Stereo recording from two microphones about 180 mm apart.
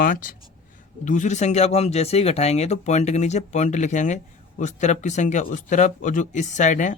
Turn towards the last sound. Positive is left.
turn(degrees=45)  # may be behind; listen again after turning